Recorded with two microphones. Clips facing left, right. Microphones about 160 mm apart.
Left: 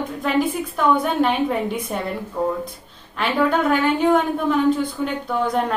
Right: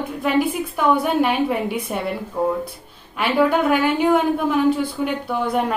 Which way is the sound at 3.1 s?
10° right (ahead or behind).